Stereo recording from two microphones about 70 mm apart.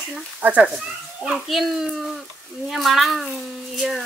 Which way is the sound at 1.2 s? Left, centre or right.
Centre.